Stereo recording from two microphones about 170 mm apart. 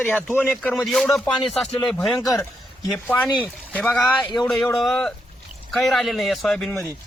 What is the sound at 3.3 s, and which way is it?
Speech, 5° right (ahead or behind).